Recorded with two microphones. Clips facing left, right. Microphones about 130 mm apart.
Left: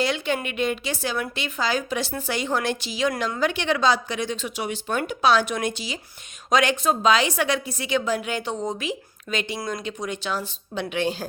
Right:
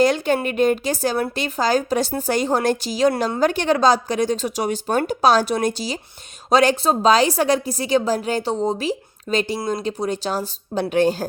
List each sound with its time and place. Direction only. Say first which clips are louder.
0.0 s a woman's voice: right 7 dB; 45° right (ahead or behind)